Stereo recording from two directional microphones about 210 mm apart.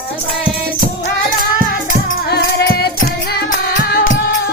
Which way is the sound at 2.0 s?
50° left (ahead or behind).